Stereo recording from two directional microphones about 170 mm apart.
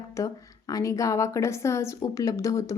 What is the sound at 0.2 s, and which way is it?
A woman's voice, 20° left (ahead or behind).